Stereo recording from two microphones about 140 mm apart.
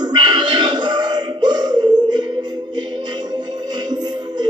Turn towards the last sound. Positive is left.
turn(degrees=-30)  # may be behind; listen again after turning